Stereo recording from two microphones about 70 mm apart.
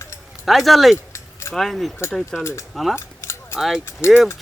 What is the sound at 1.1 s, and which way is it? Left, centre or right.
Keys jangling, left.